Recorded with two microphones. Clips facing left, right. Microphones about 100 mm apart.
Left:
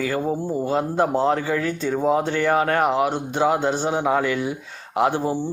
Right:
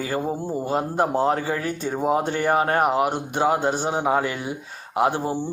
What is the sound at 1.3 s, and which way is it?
A man's voice, 35° right (ahead or behind).